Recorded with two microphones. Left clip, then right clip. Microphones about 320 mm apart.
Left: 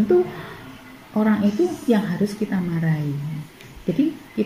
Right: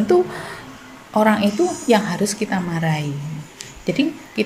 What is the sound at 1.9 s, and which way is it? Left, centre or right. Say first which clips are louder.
A woman's voice: right 5 dB; right.